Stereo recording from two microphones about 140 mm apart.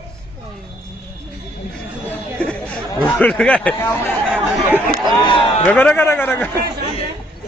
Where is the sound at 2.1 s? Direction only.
10° left (ahead or behind).